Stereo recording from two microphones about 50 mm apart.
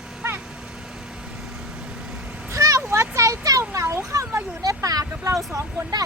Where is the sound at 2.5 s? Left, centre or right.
Right.